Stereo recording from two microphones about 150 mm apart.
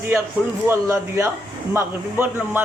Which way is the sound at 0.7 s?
20° right (ahead or behind).